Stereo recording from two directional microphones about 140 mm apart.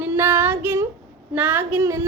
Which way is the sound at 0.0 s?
15° right (ahead or behind).